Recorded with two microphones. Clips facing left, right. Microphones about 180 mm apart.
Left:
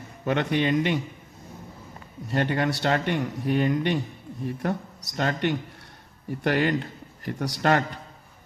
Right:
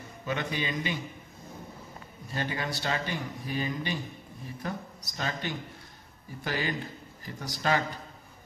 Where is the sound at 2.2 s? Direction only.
65° left (ahead or behind).